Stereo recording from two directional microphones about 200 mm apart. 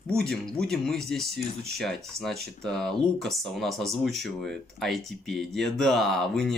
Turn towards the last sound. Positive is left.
turn(degrees=0)  # may be behind; listen again after turning